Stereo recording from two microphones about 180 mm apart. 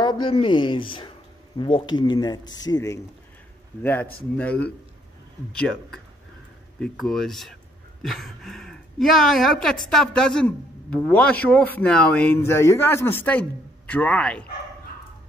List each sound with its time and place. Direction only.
0.0 s speech: 25° left (ahead or behind); by 14.4 s 5° left (ahead or behind)